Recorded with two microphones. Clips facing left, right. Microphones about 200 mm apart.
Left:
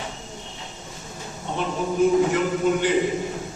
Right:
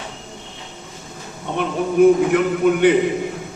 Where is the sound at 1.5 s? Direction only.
60° right (ahead or behind).